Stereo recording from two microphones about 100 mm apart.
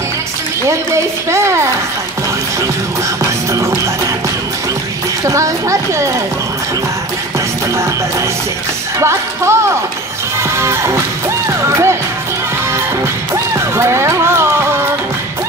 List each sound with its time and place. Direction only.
0.7 s a woman's voice: 30° right (ahead or behind)
5.2 s a child's voice: 30° right (ahead or behind)
9.0 s a woman's voice: 25° right (ahead or behind)
10.5 s music: 25° right (ahead or behind)
13.3 s music: 25° right (ahead or behind)